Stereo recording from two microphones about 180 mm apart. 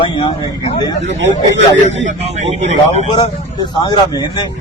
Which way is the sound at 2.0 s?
40° right (ahead or behind).